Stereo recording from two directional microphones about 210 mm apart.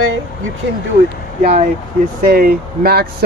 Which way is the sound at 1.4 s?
35° right (ahead or behind).